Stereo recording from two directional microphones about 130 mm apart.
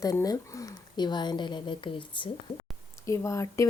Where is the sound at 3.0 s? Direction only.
20° left (ahead or behind).